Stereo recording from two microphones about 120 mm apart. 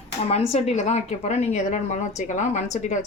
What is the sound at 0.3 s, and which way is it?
Speech, 60° left (ahead or behind).